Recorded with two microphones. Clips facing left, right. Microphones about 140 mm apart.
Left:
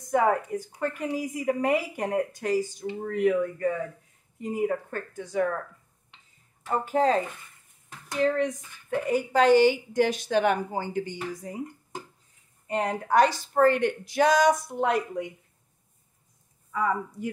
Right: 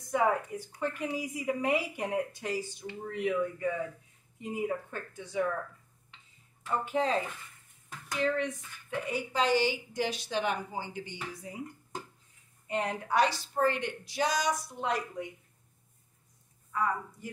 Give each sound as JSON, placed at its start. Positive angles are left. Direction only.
{"t": 0.1, "sound": "speech", "side_deg": 50}
{"t": 6.6, "sound": "speech", "side_deg": 40}
{"t": 11.1, "sound": "speech", "side_deg": 40}
{"t": 12.6, "sound": "speech", "side_deg": 40}